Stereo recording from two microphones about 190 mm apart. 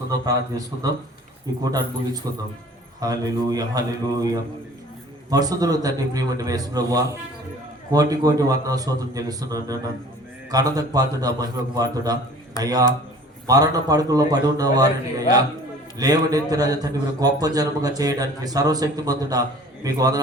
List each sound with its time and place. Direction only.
0.3 s a man's voice: 20° right (ahead or behind)